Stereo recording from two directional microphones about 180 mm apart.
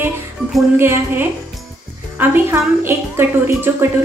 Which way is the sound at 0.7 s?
15° right (ahead or behind).